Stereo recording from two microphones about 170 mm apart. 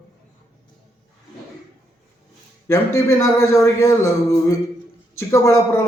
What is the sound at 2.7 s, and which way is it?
A man's voice, 15° left (ahead or behind).